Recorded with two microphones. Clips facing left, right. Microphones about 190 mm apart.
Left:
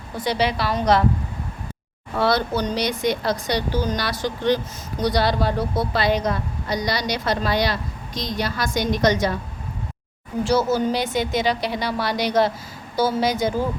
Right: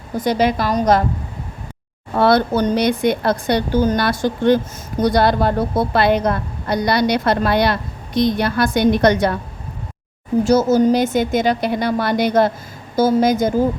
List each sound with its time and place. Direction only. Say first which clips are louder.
0.1 s speech: right 5 dB; 45° right (ahead or behind)
2.1 s speech: right 6 dB; 55° right (ahead or behind)
10.4 s speech: right 6 dB; 45° right (ahead or behind)